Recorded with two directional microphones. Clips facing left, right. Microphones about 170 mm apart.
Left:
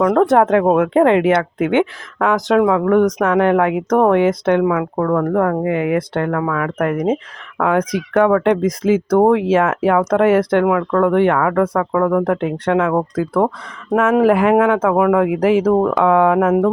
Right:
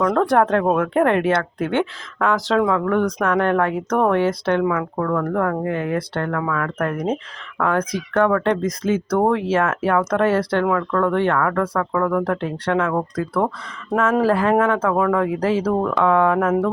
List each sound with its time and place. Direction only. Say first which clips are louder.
0.0 s speech: left 4 dB; 20° left (ahead or behind)